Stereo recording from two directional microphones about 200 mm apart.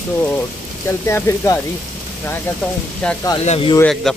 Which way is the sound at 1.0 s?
10° left (ahead or behind).